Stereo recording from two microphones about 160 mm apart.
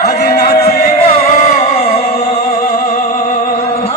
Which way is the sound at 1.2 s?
40° left (ahead or behind).